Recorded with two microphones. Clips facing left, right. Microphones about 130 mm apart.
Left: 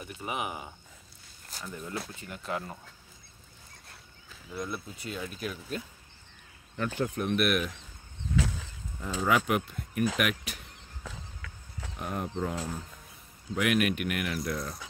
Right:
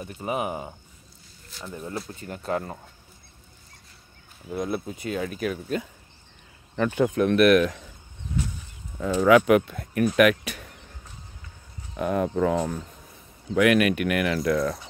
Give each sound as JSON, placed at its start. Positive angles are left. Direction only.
{"t": 0.0, "sound": "speech", "side_deg": -35}
{"t": 4.5, "sound": "speech", "side_deg": -55}
{"t": 5.2, "sound": "speech", "side_deg": -90}
{"t": 9.0, "sound": "speech", "side_deg": -90}
{"t": 11.1, "sound": "walk", "side_deg": 90}
{"t": 12.0, "sound": "speech", "side_deg": -90}